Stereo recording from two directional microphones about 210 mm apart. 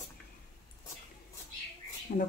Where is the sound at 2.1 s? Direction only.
40° left (ahead or behind).